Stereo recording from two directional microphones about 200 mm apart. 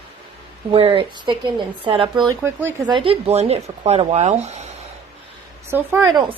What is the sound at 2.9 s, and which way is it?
A woman's voice, 25° right (ahead or behind).